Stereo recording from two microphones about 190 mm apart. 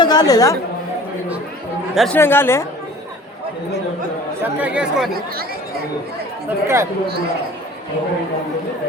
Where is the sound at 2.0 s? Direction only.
10° left (ahead or behind).